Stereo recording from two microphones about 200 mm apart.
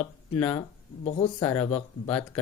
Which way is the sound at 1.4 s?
20° left (ahead or behind).